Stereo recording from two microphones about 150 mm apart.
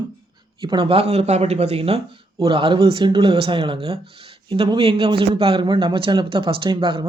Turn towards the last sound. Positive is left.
turn(degrees=-35)  # may be behind; listen again after turning